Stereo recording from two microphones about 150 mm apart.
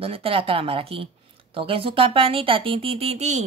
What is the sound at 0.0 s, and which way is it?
Speech, 40° right (ahead or behind).